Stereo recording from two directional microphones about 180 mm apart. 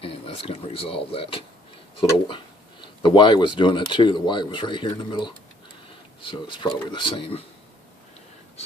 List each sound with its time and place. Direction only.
0.0 s speech: 30° left (ahead or behind)